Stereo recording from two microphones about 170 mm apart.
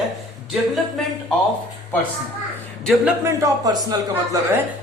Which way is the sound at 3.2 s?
20° right (ahead or behind).